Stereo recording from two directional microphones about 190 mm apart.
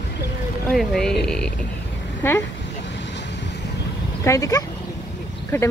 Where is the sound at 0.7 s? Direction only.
Centre (ahead or behind).